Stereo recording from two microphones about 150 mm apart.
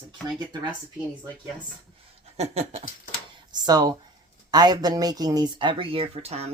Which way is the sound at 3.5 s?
25° right (ahead or behind).